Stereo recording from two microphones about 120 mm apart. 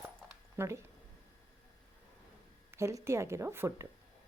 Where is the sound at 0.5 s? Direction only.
20° right (ahead or behind).